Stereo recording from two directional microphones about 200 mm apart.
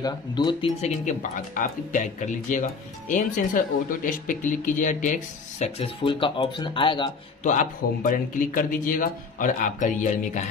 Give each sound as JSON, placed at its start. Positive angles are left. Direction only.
{"t": 0.0, "sound": "speech", "side_deg": 20}
{"t": 5.6, "sound": "speech", "side_deg": 25}
{"t": 7.4, "sound": "speech", "side_deg": 40}